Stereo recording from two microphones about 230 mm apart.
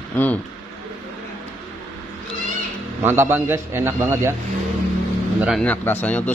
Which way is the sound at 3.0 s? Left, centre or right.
Centre.